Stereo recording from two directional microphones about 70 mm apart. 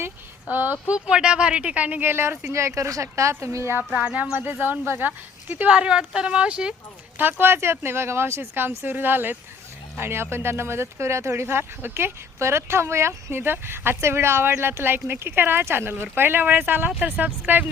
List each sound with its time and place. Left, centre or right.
0.4 s speech: right
0.9 s speech: centre; by 3.8 s right
3.9 s speech: right
7.2 s speech: right